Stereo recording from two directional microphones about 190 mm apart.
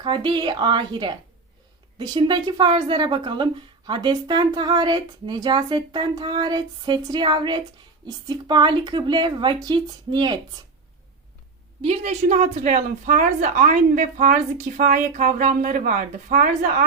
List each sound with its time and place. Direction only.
0.0 s a woman's voice: 25° right (ahead or behind)
11.8 s a woman's voice: 35° right (ahead or behind)